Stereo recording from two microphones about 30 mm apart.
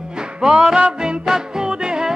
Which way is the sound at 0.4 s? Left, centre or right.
Centre.